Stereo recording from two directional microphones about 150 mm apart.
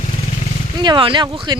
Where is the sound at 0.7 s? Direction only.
30° right (ahead or behind).